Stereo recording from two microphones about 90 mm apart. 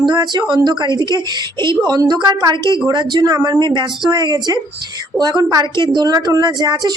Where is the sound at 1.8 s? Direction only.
45° right (ahead or behind).